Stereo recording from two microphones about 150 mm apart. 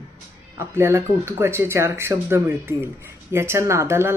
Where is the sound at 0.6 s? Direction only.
20° right (ahead or behind).